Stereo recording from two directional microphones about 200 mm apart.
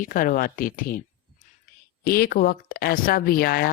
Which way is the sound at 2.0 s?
50° left (ahead or behind).